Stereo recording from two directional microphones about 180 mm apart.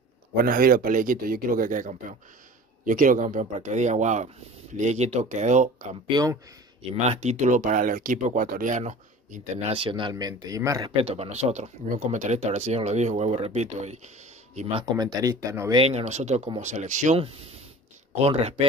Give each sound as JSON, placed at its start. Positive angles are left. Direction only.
{"t": 0.4, "sound": "speech", "side_deg": -50}
{"t": 6.0, "sound": "speech", "side_deg": -20}
{"t": 6.9, "sound": "speech", "side_deg": -40}
{"t": 11.0, "sound": "speech", "side_deg": -35}
{"t": 15.7, "sound": "speech", "side_deg": -35}